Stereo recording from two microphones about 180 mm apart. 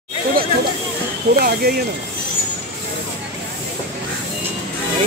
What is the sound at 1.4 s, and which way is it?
Speech, 60° right (ahead or behind).